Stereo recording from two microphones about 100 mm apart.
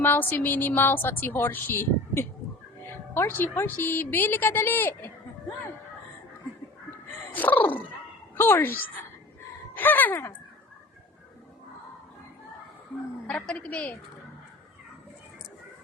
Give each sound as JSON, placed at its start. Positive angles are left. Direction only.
{"t": 0.0, "sound": "a woman's voice", "side_deg": 20}
{"t": 7.3, "sound": "a woman's voice", "side_deg": 15}
{"t": 13.2, "sound": "a woman's voice", "side_deg": 5}